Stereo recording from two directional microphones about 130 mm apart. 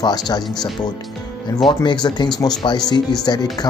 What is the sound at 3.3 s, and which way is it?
Speech, 35° left (ahead or behind).